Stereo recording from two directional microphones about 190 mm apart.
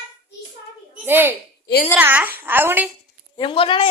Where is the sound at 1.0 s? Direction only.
10° right (ahead or behind).